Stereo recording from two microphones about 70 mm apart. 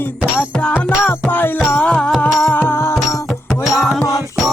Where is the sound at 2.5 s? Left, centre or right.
Left.